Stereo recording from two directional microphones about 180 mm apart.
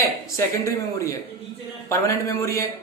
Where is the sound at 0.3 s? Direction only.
15° left (ahead or behind).